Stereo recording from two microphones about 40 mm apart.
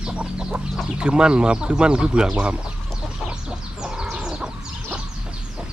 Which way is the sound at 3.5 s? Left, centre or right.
Centre.